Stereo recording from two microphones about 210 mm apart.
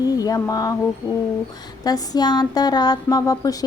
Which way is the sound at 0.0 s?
15° left (ahead or behind).